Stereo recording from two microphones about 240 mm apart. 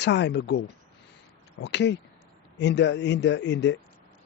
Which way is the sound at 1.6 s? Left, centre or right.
Left.